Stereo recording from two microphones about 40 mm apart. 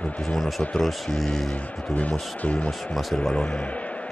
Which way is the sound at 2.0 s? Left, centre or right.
Left.